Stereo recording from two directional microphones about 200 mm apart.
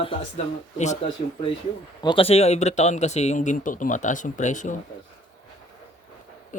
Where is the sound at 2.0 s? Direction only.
25° left (ahead or behind).